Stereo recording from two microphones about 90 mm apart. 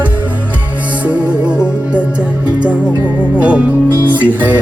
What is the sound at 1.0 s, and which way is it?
Music, 15° right (ahead or behind).